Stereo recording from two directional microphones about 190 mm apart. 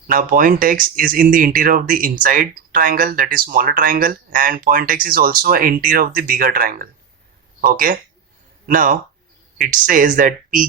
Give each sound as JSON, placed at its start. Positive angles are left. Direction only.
{"t": 0.1, "sound": "speech", "side_deg": -45}